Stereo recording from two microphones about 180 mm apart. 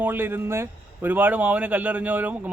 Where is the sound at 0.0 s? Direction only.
10° right (ahead or behind).